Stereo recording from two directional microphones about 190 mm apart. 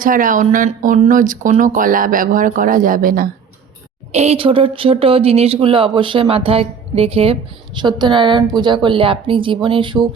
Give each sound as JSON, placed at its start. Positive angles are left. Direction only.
{"t": 0.0, "sound": "speech", "side_deg": -45}
{"t": 4.1, "sound": "speech", "side_deg": -35}